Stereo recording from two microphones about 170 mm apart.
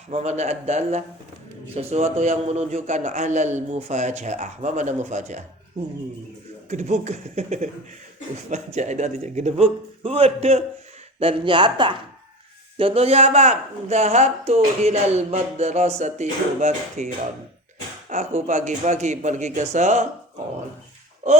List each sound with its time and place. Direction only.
0.1 s a man's voice: 40° right (ahead or behind)
6.7 s a man's voice: 45° right (ahead or behind)
18.1 s a man's voice: 45° right (ahead or behind)
21.2 s a man's voice: 45° right (ahead or behind)